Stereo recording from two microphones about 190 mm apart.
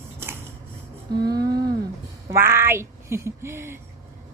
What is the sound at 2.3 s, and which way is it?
Speech, 15° right (ahead or behind).